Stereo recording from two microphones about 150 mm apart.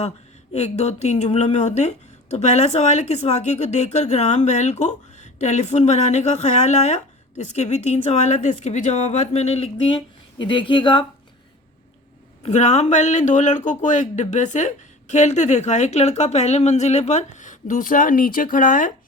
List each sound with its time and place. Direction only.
0.5 s speech: 45° left (ahead or behind)
12.4 s speech: 50° left (ahead or behind)